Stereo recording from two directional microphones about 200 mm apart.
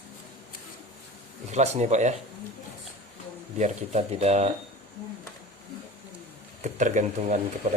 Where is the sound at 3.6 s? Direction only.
35° right (ahead or behind).